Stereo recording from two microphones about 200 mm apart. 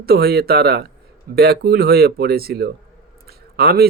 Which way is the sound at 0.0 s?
50° right (ahead or behind).